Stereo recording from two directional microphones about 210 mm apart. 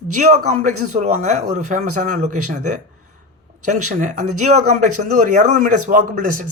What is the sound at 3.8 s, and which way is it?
Speech, 35° right (ahead or behind).